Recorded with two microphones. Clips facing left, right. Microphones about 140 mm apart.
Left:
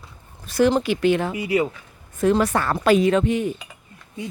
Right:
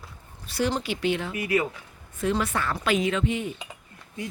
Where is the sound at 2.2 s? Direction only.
45° left (ahead or behind).